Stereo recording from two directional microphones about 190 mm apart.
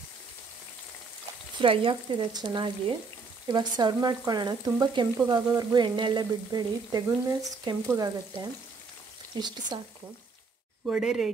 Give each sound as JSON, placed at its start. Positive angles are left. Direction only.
{"t": 1.6, "sound": "speech", "side_deg": -25}
{"t": 10.9, "sound": "speech", "side_deg": -5}